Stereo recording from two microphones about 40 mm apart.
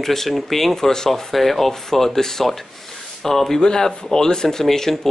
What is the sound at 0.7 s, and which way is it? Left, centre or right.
Speech, centre.